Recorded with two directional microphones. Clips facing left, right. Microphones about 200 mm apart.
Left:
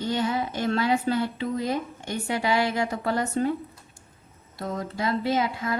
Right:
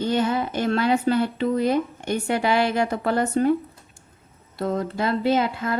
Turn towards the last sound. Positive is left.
turn(degrees=-55)  # may be behind; listen again after turning